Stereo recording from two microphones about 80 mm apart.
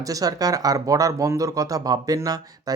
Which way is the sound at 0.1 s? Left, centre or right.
Right.